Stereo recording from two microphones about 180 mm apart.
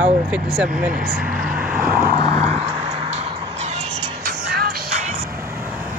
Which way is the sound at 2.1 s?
25° left (ahead or behind).